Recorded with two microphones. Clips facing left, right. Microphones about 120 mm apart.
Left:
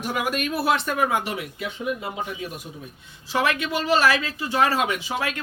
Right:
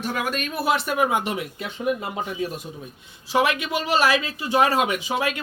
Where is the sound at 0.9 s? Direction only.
20° right (ahead or behind).